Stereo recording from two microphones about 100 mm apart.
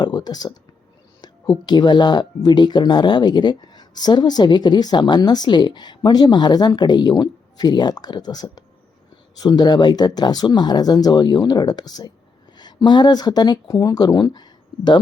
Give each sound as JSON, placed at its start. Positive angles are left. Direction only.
{"t": 0.0, "sound": "speech", "side_deg": 45}
{"t": 1.6, "sound": "speech", "side_deg": 45}